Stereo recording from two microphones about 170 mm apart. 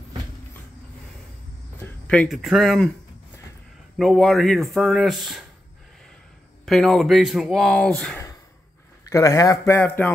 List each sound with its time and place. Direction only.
2.0 s speech: 5° left (ahead or behind)
4.0 s speech: centre (ahead or behind)
6.6 s speech: centre (ahead or behind)
9.1 s speech: 20° left (ahead or behind)